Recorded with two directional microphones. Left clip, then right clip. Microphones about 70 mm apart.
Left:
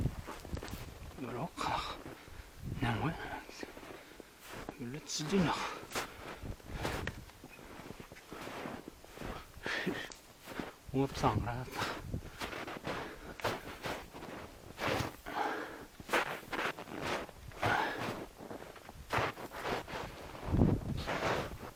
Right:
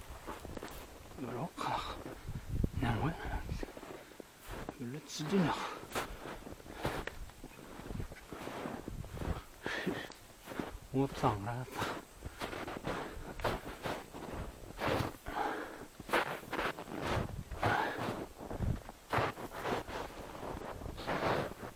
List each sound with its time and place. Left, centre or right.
0.3 s walk: left
1.2 s speech: left
2.8 s a sound: left
8.3 s a sound: left
19.1 s wind: left
20.9 s wind noise: left